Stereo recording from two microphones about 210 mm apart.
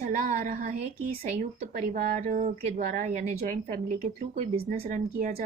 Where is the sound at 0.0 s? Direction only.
35° right (ahead or behind).